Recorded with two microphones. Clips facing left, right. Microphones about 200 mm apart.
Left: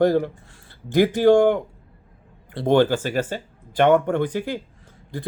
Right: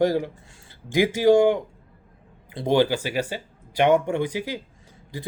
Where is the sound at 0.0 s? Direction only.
15° right (ahead or behind).